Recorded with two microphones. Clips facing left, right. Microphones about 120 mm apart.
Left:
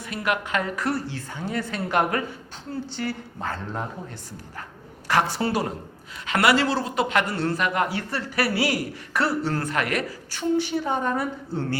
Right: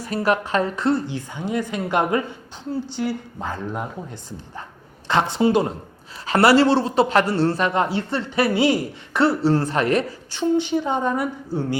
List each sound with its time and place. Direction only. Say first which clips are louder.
0.0 s a woman's voice: right 6 dB; 35° right (ahead or behind); by 5.6 s 20° right (ahead or behind)
6.2 s speech: right 6 dB; 30° right (ahead or behind); by 11.8 s 15° right (ahead or behind)